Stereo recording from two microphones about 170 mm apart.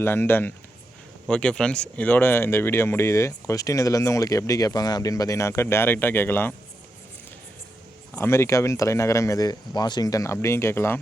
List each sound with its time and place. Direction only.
0.0 s speech: 15° left (ahead or behind)
8.1 s speech: 15° left (ahead or behind)